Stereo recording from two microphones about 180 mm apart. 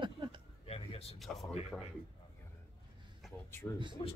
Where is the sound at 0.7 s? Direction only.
30° left (ahead or behind).